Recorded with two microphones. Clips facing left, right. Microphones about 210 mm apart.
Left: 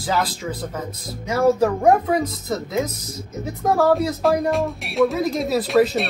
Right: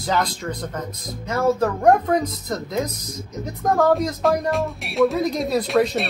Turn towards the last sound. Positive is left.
turn(degrees=0)  # may be behind; listen again after turning